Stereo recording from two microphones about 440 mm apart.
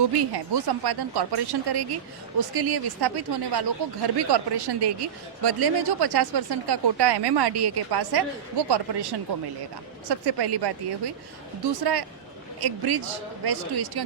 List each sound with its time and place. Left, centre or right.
0.2 s a man's voice: right